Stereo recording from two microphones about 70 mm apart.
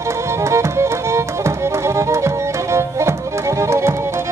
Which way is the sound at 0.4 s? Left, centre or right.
Right.